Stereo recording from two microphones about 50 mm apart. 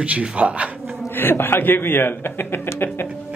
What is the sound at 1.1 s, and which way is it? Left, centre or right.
Speech, left.